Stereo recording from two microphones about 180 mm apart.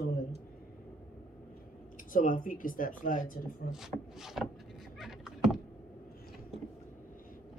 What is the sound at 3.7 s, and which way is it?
Speech, centre (ahead or behind).